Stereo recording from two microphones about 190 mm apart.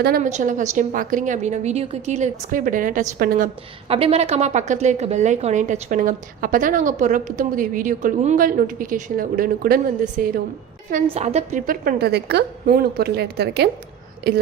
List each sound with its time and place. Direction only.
0.2 s a woman's voice: 40° right (ahead or behind)
3.8 s a woman's voice: 30° right (ahead or behind); by 10.4 s 50° right (ahead or behind)
11.1 s a woman's voice: 35° right (ahead or behind); by 13.7 s 60° right (ahead or behind)